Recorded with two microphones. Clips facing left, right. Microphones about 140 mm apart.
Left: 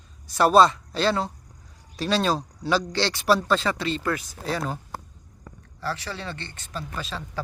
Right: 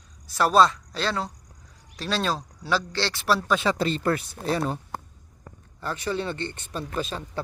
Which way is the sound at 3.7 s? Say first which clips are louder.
Right 3 dB; 40° right (ahead or behind).